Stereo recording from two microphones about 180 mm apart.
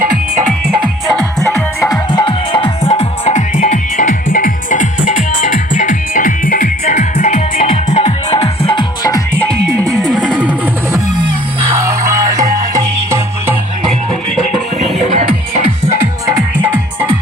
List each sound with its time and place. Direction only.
1.1 s music: 5° left (ahead or behind)
1.8 s music: 20° left (ahead or behind); by 7.4 s 40° left (ahead or behind)
7.5 s music: 50° left (ahead or behind)
7.9 s music: 35° left (ahead or behind)
10.1 s music: 5° right (ahead or behind)
10.9 s music: 20° right (ahead or behind)
14.9 s music: 40° right (ahead or behind)
16.2 s music: 15° right (ahead or behind)